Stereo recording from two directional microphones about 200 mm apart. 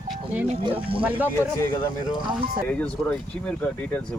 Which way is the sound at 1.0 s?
10° right (ahead or behind).